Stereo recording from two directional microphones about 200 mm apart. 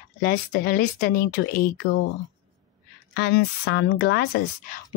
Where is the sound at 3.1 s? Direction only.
55° left (ahead or behind).